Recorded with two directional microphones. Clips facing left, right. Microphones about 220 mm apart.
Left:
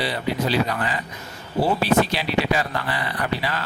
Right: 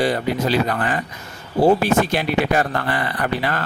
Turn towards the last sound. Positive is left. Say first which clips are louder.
# right 3 dB
turn(degrees=-50)  # may be behind; listen again after turning